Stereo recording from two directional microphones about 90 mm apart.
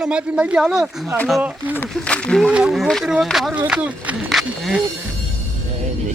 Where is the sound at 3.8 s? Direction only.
20° right (ahead or behind).